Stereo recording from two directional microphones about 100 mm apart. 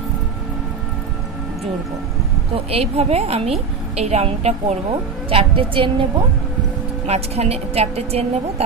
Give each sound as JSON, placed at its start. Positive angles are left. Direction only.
{"t": 2.5, "sound": "a woman's voice", "side_deg": -85}
{"t": 5.3, "sound": "a woman's voice", "side_deg": -65}
{"t": 7.1, "sound": "a woman's voice", "side_deg": -90}